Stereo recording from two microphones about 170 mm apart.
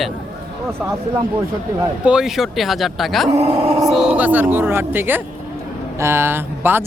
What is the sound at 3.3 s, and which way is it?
Speech, 35° right (ahead or behind).